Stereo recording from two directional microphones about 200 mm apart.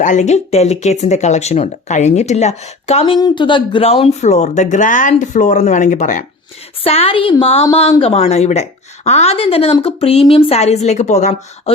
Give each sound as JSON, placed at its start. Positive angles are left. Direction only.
{"t": 0.0, "sound": "a woman's voice", "side_deg": 35}